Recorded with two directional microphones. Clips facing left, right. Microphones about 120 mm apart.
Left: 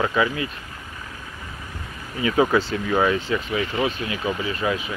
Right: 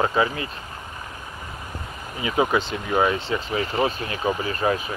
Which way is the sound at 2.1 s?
20° right (ahead or behind).